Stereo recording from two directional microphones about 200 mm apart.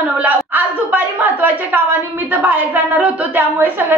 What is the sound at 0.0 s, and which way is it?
A woman's voice, 10° right (ahead or behind).